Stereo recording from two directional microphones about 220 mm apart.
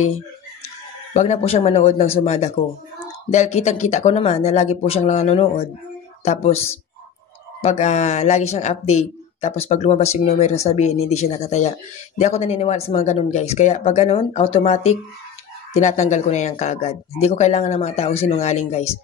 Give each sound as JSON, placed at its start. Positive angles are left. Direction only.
{"t": 1.1, "sound": "speech", "side_deg": 30}